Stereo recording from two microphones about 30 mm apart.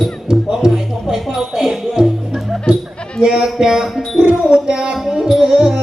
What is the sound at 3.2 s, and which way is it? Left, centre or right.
Speech, right.